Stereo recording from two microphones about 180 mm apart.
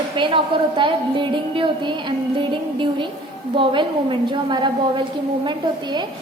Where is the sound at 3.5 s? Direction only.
25° right (ahead or behind).